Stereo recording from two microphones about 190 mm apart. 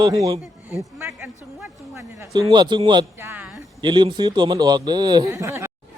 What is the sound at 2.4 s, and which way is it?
Speech, 20° right (ahead or behind).